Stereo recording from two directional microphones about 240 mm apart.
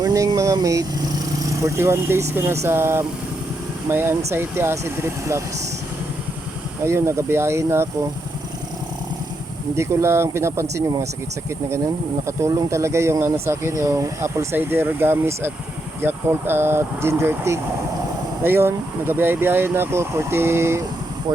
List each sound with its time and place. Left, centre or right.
0.0 s a sound: centre
1.6 s speech: centre
6.8 s speech: centre
9.7 s speech: centre
12.2 s speech: centre